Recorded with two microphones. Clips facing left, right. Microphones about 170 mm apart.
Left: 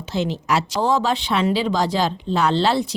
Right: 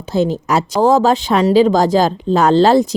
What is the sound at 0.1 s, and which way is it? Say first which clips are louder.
A woman's voice: right 6 dB; 40° right (ahead or behind).